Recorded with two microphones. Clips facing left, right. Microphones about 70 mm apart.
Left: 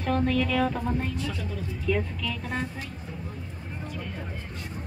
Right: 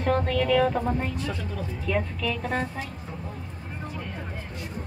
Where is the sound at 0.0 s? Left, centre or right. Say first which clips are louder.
Right 1 dB; right.